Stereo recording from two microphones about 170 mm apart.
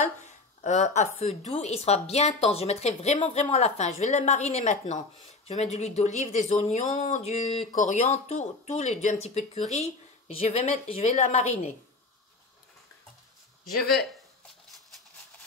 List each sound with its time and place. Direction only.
0.0 s speech: 45° left (ahead or behind)